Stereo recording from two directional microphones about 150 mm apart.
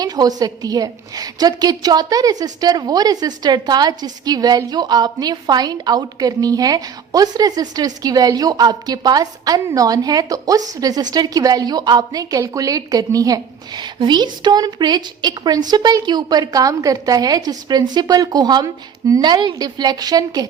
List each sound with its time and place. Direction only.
0.0 s a woman's voice: 25° right (ahead or behind)